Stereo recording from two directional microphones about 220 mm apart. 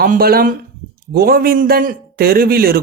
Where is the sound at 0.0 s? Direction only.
45° right (ahead or behind).